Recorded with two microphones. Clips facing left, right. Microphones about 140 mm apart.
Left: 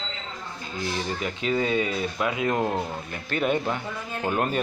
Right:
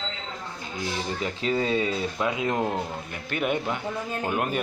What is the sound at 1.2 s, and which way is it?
Speech, 30° right (ahead or behind).